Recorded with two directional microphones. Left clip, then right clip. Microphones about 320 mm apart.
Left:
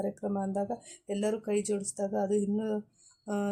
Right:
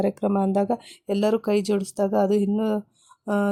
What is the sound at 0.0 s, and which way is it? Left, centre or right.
Speech, right.